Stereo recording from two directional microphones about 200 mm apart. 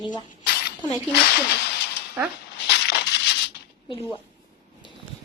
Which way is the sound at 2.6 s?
55° left (ahead or behind).